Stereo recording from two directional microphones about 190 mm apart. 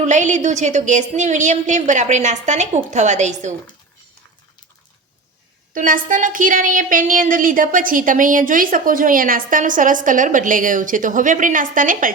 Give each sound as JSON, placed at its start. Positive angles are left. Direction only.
{"t": 0.0, "sound": "a woman's voice", "side_deg": -40}
{"t": 5.7, "sound": "a woman's voice", "side_deg": -45}